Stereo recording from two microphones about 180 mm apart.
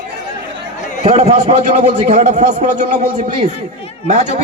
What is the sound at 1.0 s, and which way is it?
A man's voice, 35° right (ahead or behind).